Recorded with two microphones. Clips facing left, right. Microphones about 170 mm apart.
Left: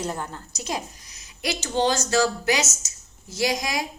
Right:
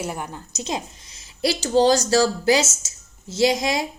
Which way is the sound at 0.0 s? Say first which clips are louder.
Right 1 dB; 10° right (ahead or behind).